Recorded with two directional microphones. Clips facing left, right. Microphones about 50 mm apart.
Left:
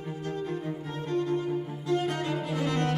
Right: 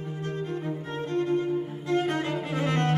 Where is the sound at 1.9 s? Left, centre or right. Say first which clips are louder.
Right 2 dB; right.